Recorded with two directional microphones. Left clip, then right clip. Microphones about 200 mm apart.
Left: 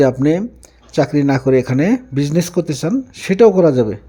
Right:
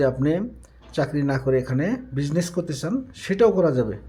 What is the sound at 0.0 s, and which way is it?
Speech, 30° left (ahead or behind).